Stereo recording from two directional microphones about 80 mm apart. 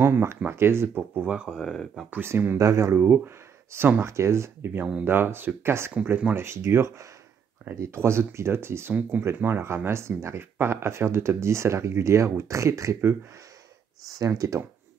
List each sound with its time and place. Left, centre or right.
0.0 s speech: right
1.2 s speech: centre
1.6 s speech: centre
2.0 s speech: right
2.5 s speech: right
3.0 s speech: right
14.1 s speech: right